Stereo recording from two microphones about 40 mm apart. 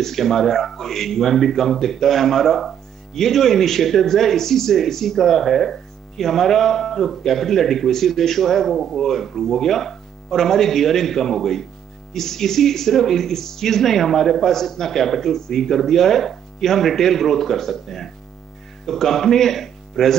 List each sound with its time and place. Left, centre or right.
0.0 s speech: centre